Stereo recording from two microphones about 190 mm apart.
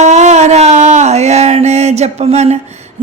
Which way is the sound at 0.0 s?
40° right (ahead or behind).